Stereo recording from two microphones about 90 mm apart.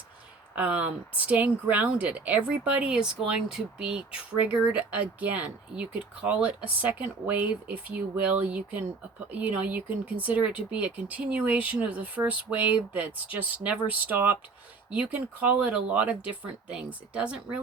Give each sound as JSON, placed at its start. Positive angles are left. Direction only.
{"t": 0.5, "sound": "speech", "side_deg": -15}